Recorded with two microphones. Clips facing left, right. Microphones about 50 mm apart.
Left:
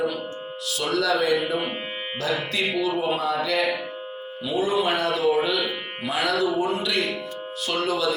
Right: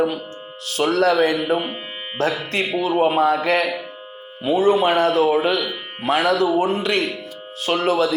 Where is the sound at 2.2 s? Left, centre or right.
Right.